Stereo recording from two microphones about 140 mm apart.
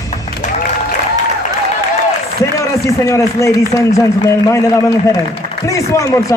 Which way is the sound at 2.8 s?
20° left (ahead or behind).